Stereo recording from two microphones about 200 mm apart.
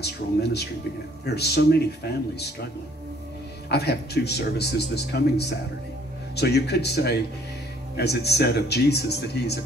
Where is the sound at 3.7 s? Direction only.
55° left (ahead or behind).